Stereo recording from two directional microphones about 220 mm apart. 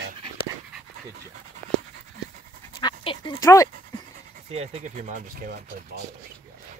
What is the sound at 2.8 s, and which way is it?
Dog, 20° left (ahead or behind).